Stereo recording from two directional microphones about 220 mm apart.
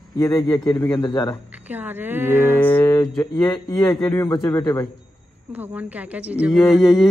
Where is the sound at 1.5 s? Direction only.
5° right (ahead or behind).